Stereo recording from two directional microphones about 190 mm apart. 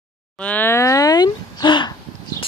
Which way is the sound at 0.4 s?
10° left (ahead or behind).